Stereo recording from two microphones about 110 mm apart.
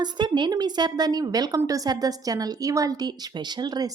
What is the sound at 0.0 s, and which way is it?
A woman's voice, 40° right (ahead or behind).